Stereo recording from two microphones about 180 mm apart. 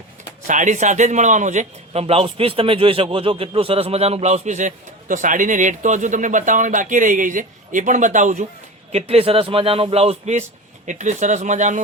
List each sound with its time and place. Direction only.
0.4 s a man's voice: 45° right (ahead or behind)